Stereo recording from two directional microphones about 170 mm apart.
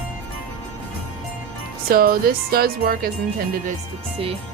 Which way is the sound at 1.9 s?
60° right (ahead or behind).